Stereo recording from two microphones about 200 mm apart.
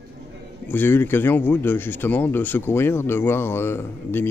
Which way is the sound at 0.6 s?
10° left (ahead or behind).